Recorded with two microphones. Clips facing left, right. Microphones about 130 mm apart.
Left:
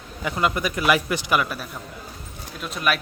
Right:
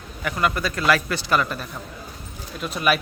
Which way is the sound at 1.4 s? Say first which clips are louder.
Right 1 dB; 5° left (ahead or behind).